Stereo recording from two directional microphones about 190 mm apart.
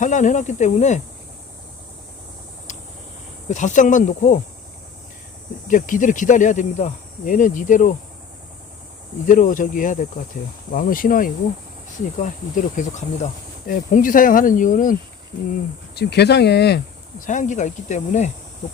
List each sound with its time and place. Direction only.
0.0 s speech: 40° left (ahead or behind)
2.7 s vehicle: 40° left (ahead or behind)
3.5 s speech: 40° left (ahead or behind)
5.6 s speech: 45° left (ahead or behind)
9.2 s speech: 45° left (ahead or behind)
16.0 s speech: 60° left (ahead or behind)
17.2 s speech: 40° left (ahead or behind)